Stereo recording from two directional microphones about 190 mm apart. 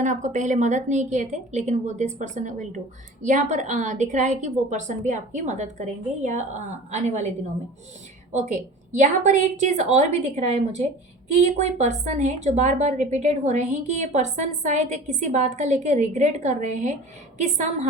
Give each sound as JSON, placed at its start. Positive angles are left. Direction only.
{"t": 0.0, "sound": "a woman's voice", "side_deg": -40}
{"t": 8.3, "sound": "a woman's voice", "side_deg": -35}